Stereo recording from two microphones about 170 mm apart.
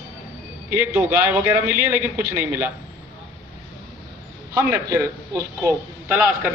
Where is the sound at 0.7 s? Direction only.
10° right (ahead or behind).